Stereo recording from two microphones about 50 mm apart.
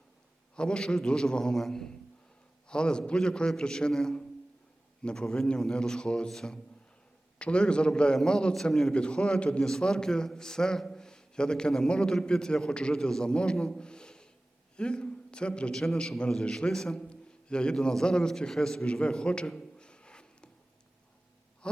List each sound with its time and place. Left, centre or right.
0.5 s a man's voice: centre
10.8 s a sound: centre
11.9 s a man's voice: centre
15.7 s a man's voice: centre
16.0 s a man's voice: centre